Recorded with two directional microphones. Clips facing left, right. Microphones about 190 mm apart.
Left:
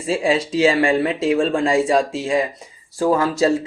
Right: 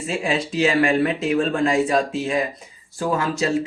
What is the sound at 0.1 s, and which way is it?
Speech, 30° left (ahead or behind).